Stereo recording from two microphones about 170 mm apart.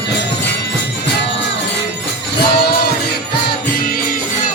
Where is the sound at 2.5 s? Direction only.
70° left (ahead or behind).